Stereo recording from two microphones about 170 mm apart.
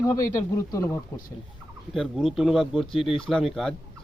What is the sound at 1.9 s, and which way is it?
Speech, centre (ahead or behind).